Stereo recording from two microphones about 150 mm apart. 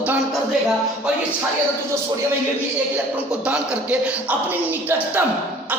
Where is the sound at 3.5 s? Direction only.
10° right (ahead or behind).